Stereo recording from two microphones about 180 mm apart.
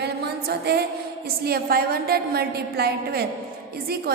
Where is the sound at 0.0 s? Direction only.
65° right (ahead or behind).